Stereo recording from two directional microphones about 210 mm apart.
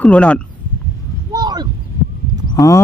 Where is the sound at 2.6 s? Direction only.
15° left (ahead or behind).